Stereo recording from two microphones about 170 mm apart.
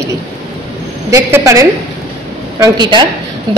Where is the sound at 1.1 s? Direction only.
20° right (ahead or behind).